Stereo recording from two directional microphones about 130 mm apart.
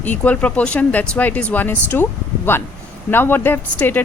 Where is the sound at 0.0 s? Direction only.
10° left (ahead or behind).